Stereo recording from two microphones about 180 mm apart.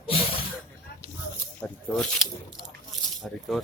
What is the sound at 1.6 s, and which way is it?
Speech, 5° left (ahead or behind).